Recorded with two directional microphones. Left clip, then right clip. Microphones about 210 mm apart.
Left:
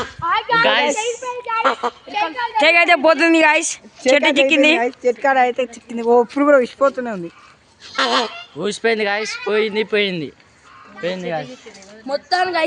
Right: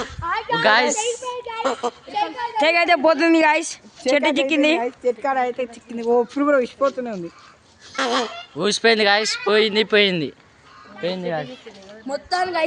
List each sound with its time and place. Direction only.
0.0 s a sound: 35° left (ahead or behind)
0.6 s speech: 25° right (ahead or behind)
1.5 s a sound: 30° left (ahead or behind)
1.7 s a woman's voice: 55° left (ahead or behind)
2.1 s a woman's voice: 30° left (ahead or behind)
2.6 s speech: centre (ahead or behind)
4.8 s speech: 40° left (ahead or behind); by 7.2 s 20° left (ahead or behind)
7.9 s a woman's voice: 35° left (ahead or behind)
8.5 s speech: 20° right (ahead or behind)
12.0 s a woman's voice: 35° left (ahead or behind)